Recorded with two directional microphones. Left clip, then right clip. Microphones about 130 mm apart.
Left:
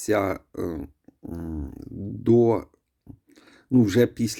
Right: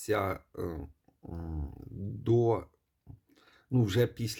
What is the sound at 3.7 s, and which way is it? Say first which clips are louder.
Speech: left 9 dB; 35° left (ahead or behind).